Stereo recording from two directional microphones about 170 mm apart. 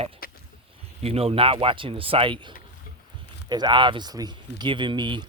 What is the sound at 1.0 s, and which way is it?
Speech, 35° right (ahead or behind).